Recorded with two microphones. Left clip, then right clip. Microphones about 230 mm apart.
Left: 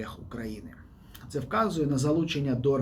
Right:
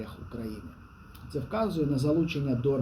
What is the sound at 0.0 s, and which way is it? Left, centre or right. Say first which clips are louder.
Speech: left 2 dB; centre.